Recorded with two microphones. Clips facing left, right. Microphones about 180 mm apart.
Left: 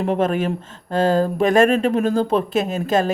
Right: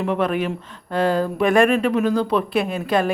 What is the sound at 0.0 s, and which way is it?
Speech, 40° left (ahead or behind).